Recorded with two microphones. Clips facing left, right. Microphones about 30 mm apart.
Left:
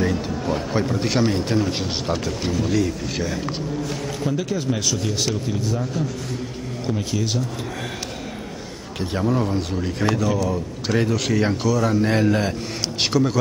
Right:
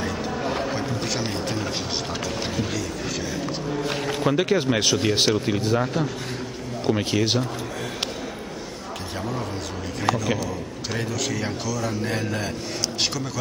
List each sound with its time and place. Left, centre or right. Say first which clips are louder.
1.2 s speech: left 6 dB; centre
2.8 s a man's voice: left 5 dB; centre
4.2 s speech: right 4 dB; right
9.2 s a man's voice: left 9 dB; centre